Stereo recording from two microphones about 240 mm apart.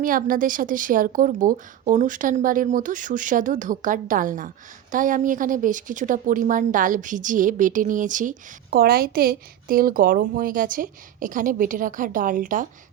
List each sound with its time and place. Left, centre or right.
0.0 s speech: right